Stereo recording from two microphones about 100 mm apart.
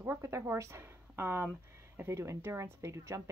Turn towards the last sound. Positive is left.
turn(degrees=-30)  # may be behind; listen again after turning